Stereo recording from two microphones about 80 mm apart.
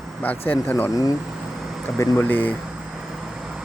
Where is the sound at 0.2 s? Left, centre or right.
Left.